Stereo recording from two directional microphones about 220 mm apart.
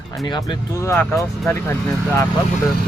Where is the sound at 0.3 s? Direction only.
20° left (ahead or behind).